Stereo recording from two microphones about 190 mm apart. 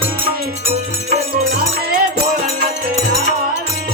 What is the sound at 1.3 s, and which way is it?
Music, 50° right (ahead or behind).